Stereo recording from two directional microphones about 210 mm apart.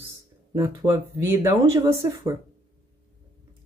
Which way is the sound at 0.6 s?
15° right (ahead or behind).